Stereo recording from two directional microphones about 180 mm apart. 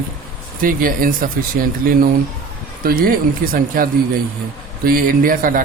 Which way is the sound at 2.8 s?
55° right (ahead or behind).